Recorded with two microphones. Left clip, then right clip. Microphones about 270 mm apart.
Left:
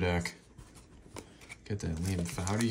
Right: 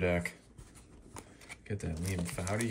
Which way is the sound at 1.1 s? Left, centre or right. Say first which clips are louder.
Left 1 dB; centre.